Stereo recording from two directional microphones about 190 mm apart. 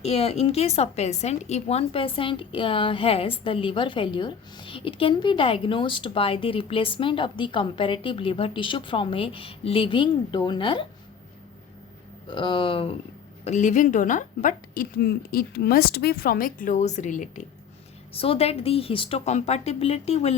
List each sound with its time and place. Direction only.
0.0 s speech: 30° left (ahead or behind)
12.3 s a woman's voice: 25° left (ahead or behind)
18.1 s a woman's voice: 30° left (ahead or behind)